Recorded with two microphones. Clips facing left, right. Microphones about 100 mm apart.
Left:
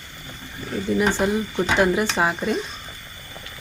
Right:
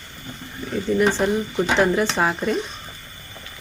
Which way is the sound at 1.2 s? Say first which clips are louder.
Right 1 dB; 10° left (ahead or behind).